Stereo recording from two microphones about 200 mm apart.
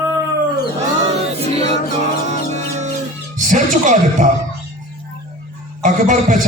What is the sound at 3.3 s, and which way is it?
Speech, 40° right (ahead or behind).